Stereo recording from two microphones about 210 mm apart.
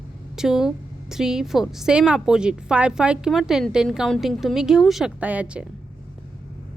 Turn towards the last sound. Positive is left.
turn(degrees=-5)  # may be behind; listen again after turning